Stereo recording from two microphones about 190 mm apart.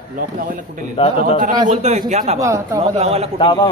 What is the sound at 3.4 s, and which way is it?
Speech, 25° left (ahead or behind).